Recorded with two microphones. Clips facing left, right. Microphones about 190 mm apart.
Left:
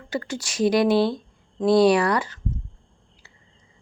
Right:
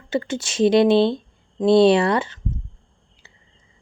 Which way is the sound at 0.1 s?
25° right (ahead or behind).